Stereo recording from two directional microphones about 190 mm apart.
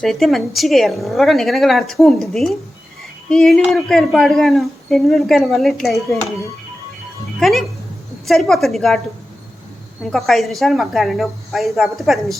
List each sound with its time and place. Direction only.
0.0 s speech: centre (ahead or behind)
7.3 s speech: centre (ahead or behind)
10.1 s speech: centre (ahead or behind)